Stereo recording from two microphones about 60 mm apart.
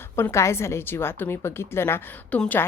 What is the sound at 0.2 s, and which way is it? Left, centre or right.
A woman's voice, left.